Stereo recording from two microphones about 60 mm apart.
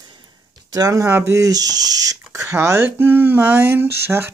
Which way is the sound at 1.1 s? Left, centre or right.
Right.